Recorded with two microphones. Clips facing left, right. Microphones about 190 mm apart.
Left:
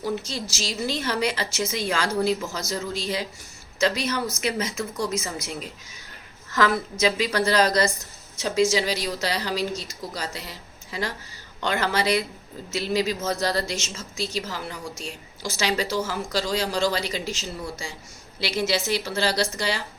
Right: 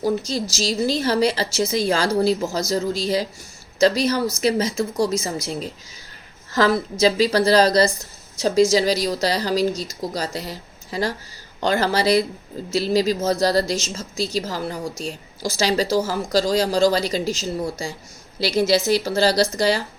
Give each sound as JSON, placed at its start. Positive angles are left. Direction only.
{"t": 0.0, "sound": "a woman's voice", "side_deg": -40}